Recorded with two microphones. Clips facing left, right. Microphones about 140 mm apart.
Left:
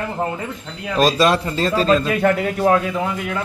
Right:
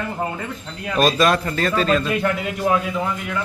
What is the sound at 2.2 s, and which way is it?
Speech, 55° left (ahead or behind).